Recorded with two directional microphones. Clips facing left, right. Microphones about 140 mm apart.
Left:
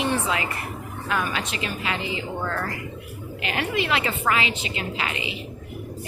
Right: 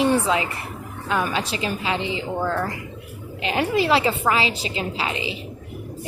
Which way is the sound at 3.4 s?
30° right (ahead or behind).